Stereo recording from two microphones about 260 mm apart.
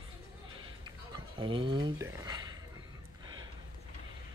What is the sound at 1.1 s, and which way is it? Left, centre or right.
Speech, centre.